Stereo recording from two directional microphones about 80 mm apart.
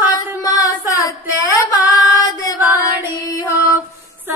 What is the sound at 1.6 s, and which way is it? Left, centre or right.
Female singing, left.